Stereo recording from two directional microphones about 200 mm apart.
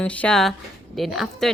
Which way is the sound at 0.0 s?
5° left (ahead or behind).